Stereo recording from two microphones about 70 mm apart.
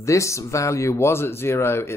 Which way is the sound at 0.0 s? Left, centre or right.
Left.